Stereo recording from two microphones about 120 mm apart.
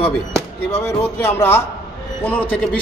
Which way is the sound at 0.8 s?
20° left (ahead or behind).